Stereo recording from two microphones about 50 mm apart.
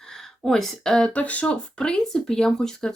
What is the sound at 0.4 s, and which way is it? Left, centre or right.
Speech, centre.